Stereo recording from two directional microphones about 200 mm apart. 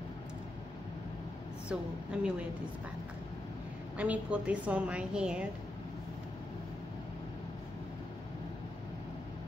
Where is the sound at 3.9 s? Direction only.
5° right (ahead or behind).